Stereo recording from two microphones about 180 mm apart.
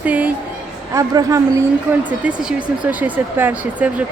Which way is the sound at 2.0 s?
5° right (ahead or behind).